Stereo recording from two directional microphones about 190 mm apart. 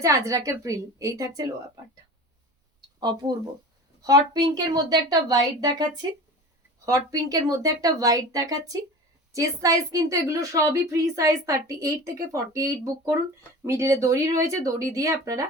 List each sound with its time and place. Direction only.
0.0 s a woman's voice: 15° right (ahead or behind)
3.0 s speech: 20° right (ahead or behind)
6.8 s a woman's voice: 20° right (ahead or behind)